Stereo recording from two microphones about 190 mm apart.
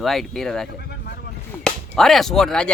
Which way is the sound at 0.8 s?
55° left (ahead or behind).